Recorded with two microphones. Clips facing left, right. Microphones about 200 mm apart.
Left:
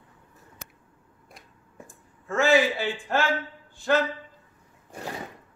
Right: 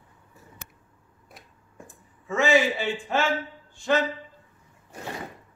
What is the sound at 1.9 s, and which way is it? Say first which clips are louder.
Speech: right 1 dB; centre (ahead or behind).